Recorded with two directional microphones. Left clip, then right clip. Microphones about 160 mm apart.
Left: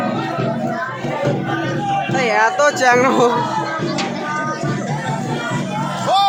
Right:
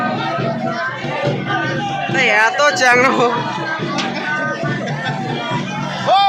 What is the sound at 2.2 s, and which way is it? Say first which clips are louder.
Music: right 3 dB; 25° left (ahead or behind).